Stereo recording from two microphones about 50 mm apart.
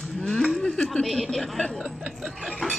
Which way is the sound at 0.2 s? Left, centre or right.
Centre.